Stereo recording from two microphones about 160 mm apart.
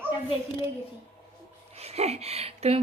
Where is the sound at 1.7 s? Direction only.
40° right (ahead or behind).